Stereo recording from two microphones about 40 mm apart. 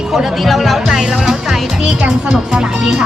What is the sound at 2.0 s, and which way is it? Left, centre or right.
Speech, right.